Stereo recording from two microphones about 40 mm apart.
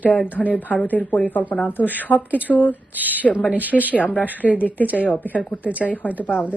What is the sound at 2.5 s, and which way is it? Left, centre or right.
Speech, left.